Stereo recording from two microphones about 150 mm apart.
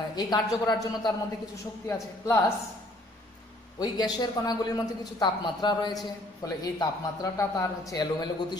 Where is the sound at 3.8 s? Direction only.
30° left (ahead or behind).